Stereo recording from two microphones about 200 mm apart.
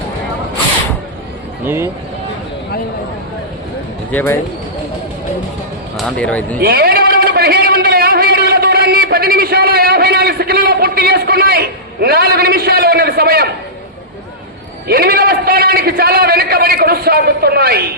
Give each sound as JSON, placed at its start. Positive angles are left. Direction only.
{"t": 1.6, "sound": "speech", "side_deg": -10}
{"t": 4.1, "sound": "speech", "side_deg": 10}
{"t": 6.0, "sound": "speech", "side_deg": 5}
{"t": 6.6, "sound": "a sound", "side_deg": -50}
{"t": 14.8, "sound": "a man's voice", "side_deg": -50}